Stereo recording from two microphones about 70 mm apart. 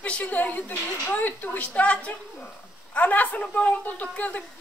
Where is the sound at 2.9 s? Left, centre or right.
Left.